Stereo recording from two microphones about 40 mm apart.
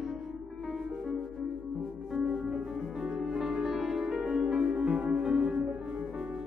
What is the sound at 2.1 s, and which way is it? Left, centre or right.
Music, centre.